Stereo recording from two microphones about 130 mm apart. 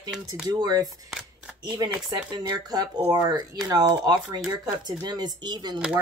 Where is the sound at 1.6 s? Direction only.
30° right (ahead or behind).